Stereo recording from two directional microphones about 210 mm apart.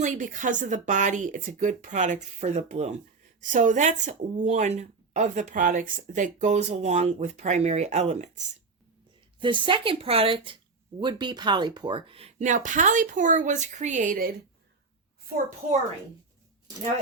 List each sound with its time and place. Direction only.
0.0 s a woman's voice: 35° right (ahead or behind)
9.4 s a woman's voice: 25° right (ahead or behind)